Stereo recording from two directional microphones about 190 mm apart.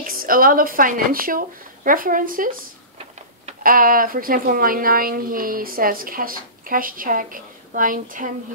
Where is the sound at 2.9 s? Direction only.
35° right (ahead or behind).